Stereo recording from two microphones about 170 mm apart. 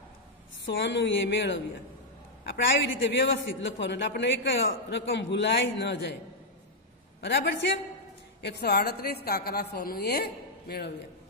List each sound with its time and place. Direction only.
0.7 s a man's voice: 90° left
7.2 s a man's voice: 85° left
8.4 s a woman's voice: 75° left (ahead or behind)